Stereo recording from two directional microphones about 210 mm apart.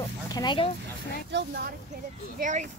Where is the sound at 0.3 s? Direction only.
20° left (ahead or behind).